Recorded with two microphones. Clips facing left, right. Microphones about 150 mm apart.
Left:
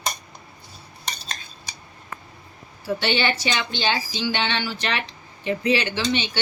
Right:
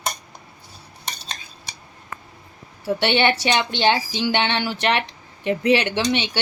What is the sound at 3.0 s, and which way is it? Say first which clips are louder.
A woman's voice: right 5 dB; 65° right (ahead or behind).